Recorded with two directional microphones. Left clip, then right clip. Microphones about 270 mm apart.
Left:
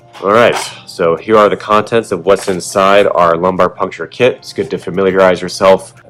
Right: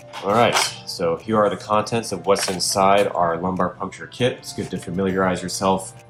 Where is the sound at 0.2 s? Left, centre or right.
Left.